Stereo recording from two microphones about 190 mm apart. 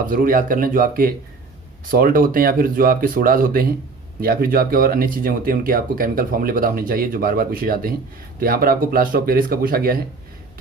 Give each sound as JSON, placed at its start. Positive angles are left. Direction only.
{"t": 0.0, "sound": "speech", "side_deg": -45}